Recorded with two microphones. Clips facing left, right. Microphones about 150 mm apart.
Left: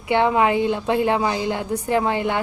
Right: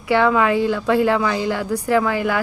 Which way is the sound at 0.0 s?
25° left (ahead or behind).